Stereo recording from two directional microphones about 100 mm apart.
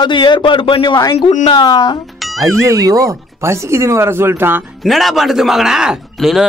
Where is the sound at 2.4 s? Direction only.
30° right (ahead or behind).